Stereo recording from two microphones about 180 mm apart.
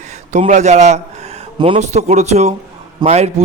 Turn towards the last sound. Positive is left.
turn(degrees=-35)  # may be behind; listen again after turning